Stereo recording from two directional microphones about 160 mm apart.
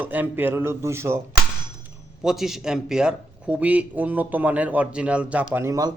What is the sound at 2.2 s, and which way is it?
A man's voice, centre (ahead or behind).